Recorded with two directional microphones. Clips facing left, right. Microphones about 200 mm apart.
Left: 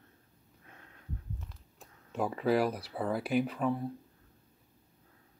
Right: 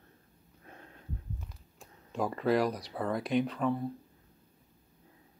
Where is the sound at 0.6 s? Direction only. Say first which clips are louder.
Right 6 dB; 35° right (ahead or behind).